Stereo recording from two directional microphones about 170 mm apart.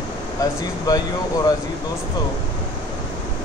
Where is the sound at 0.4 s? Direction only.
20° left (ahead or behind).